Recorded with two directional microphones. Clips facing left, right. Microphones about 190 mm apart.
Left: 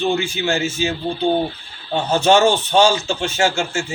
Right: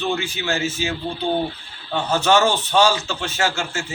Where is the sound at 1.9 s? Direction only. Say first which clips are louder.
Left 3 dB; 20° left (ahead or behind).